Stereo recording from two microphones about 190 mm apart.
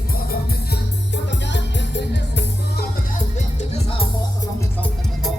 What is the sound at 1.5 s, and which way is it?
Music, 65° left (ahead or behind).